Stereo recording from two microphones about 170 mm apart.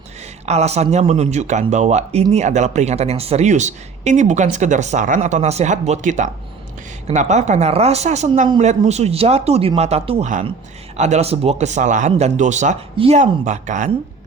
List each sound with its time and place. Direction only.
0.4 s speech: 40° right (ahead or behind)
13.0 s speech: 35° right (ahead or behind)